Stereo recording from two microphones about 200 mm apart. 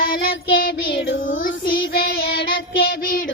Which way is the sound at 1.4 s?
45° left (ahead or behind).